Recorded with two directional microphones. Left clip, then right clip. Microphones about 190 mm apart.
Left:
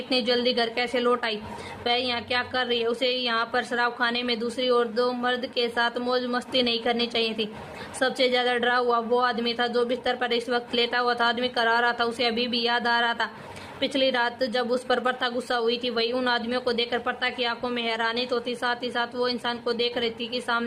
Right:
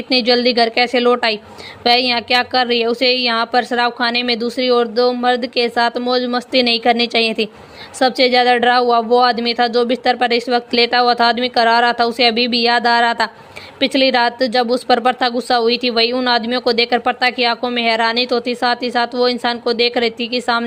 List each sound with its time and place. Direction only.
0.1 s a woman's voice: 35° right (ahead or behind)